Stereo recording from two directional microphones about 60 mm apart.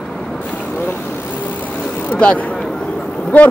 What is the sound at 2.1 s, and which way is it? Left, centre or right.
Speech, centre.